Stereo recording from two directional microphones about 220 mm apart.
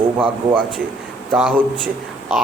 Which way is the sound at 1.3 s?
5° right (ahead or behind).